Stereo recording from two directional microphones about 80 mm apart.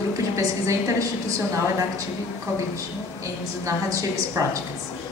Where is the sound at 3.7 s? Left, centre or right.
Right.